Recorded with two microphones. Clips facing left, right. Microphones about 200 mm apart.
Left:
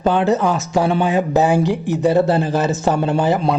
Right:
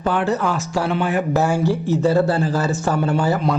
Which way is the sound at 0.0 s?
20° left (ahead or behind).